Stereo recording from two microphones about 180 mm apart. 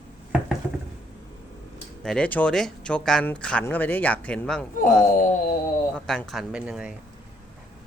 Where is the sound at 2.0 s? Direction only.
5° left (ahead or behind).